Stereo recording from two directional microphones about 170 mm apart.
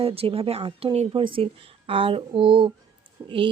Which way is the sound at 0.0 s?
35° right (ahead or behind).